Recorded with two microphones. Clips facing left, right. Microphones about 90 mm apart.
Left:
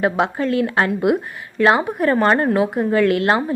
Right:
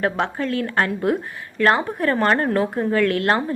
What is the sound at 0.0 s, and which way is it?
A woman's voice, 5° left (ahead or behind).